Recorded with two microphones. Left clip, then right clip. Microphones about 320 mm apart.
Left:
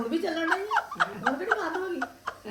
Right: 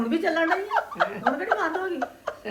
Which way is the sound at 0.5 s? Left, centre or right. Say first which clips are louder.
Right 2 dB; centre.